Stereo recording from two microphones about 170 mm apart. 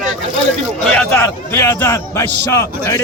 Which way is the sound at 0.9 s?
10° left (ahead or behind).